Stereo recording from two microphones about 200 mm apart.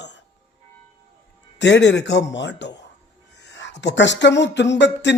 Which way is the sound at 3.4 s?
60° left (ahead or behind).